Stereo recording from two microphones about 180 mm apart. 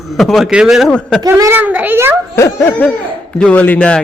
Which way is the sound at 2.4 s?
15° left (ahead or behind).